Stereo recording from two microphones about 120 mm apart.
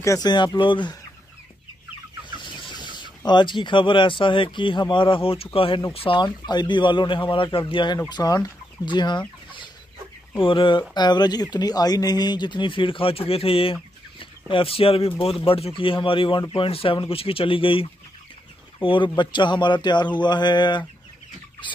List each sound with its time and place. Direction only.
0.0 s speech: 25° left (ahead or behind)
0.3 s speech: 40° left (ahead or behind)
2.4 s chicken: 40° left (ahead or behind)
3.3 s a man's voice: 40° left (ahead or behind)
10.3 s a man's voice: 45° left (ahead or behind)